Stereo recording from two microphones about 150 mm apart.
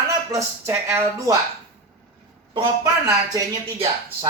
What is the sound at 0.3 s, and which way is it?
Speech, 20° right (ahead or behind).